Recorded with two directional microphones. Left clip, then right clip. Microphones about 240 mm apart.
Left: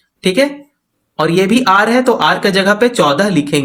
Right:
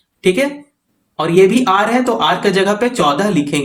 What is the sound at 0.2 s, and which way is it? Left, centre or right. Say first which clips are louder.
Speech: left 2 dB; left.